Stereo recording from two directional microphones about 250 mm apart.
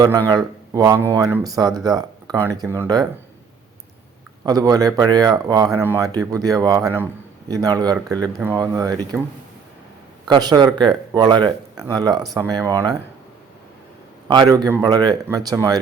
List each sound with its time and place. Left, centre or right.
0.3 s a man's voice: centre
4.4 s a man's voice: centre
10.2 s a man's voice: centre
14.3 s a man's voice: centre